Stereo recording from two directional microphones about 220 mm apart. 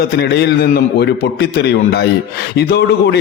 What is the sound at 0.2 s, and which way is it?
A man's voice, 50° left (ahead or behind).